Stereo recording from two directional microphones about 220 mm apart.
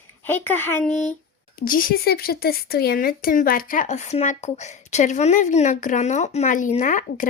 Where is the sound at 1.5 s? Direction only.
40° left (ahead or behind).